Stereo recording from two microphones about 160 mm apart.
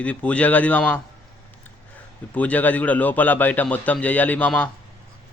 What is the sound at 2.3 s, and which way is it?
A man's voice, 10° left (ahead or behind).